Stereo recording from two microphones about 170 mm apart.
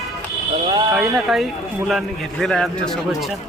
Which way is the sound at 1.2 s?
Centre (ahead or behind).